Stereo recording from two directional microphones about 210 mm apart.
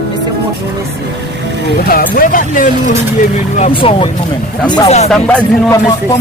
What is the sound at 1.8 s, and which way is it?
Speech, 45° left (ahead or behind).